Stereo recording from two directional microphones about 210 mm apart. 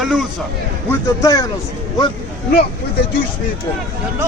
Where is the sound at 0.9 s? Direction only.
15° left (ahead or behind).